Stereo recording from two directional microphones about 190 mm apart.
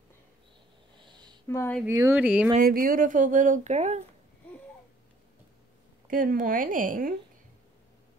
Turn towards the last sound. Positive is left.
turn(degrees=-45)  # may be behind; listen again after turning